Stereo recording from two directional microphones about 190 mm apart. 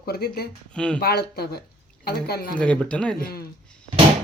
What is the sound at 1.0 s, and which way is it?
Speech, 55° left (ahead or behind).